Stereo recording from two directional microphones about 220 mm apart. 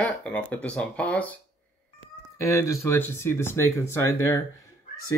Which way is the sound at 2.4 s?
15° left (ahead or behind).